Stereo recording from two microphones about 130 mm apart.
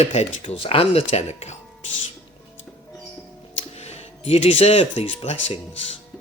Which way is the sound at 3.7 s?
55° left (ahead or behind).